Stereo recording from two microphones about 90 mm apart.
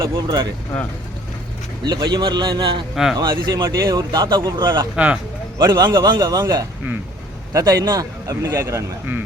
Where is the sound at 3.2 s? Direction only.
55° right (ahead or behind); by 8.8 s 30° right (ahead or behind).